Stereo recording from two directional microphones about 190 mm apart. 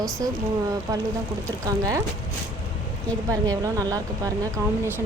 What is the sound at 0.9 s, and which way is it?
A woman's voice, 20° right (ahead or behind).